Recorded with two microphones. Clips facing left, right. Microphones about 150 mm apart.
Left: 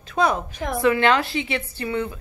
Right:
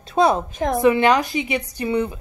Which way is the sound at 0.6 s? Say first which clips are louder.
Right 5 dB; 45° right (ahead or behind).